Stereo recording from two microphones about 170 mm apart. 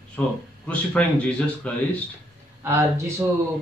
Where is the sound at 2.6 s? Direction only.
15° right (ahead or behind).